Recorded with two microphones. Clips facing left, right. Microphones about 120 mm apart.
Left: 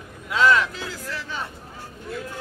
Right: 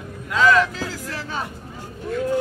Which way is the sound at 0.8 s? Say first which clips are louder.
Right 3 dB; 40° right (ahead or behind).